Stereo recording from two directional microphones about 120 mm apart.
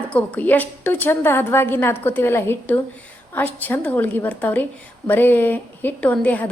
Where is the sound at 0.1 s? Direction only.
10° left (ahead or behind).